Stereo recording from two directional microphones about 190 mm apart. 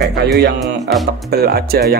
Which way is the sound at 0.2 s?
60° right (ahead or behind).